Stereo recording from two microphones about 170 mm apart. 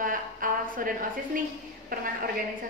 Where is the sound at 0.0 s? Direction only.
55° right (ahead or behind).